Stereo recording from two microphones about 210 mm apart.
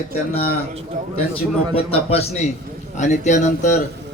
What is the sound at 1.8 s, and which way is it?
A man's voice, 30° left (ahead or behind).